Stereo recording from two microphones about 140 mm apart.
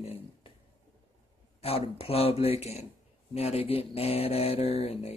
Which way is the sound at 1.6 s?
45° left (ahead or behind).